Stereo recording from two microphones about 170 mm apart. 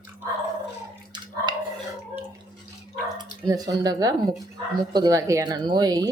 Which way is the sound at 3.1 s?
25° right (ahead or behind).